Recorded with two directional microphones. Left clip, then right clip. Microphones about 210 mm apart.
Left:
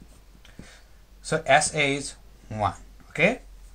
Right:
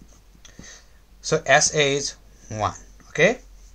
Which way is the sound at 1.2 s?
40° right (ahead or behind).